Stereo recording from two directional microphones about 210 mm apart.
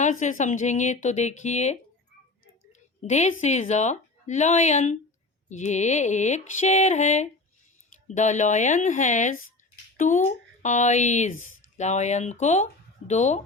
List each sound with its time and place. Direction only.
0.0 s speech: 35° left (ahead or behind)
3.0 s a woman's voice: 35° left (ahead or behind)